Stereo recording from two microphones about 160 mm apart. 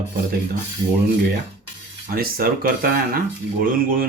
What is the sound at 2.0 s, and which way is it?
Speech, 70° right (ahead or behind).